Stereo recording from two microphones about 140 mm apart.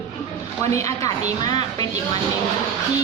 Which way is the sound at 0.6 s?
20° left (ahead or behind).